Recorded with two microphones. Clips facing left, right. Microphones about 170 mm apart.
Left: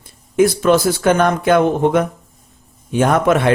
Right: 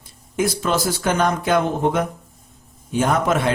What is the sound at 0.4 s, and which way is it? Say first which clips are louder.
Speech: left 8 dB; 60° left (ahead or behind).